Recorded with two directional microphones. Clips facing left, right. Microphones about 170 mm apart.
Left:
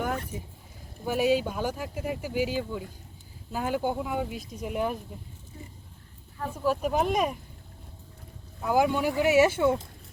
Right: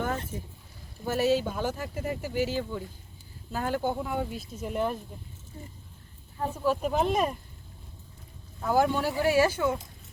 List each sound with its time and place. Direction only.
1.0 s speech: 15° left (ahead or behind)
6.7 s speech: 10° left (ahead or behind)
8.6 s speech: 15° left (ahead or behind)